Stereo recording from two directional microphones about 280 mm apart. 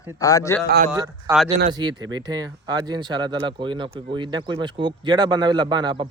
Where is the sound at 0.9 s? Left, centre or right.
Centre.